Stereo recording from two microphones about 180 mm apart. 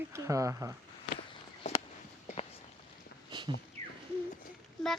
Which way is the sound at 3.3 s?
25° right (ahead or behind).